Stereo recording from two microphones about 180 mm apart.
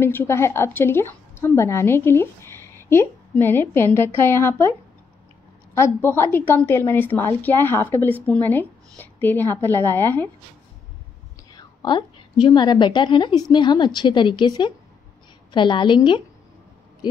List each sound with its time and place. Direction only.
0.0 s a woman's voice: 15° left (ahead or behind)
5.8 s a woman's voice: 15° left (ahead or behind)
11.8 s a woman's voice: 25° left (ahead or behind)